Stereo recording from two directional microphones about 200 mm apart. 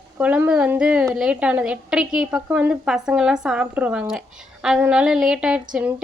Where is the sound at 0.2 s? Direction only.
5° right (ahead or behind).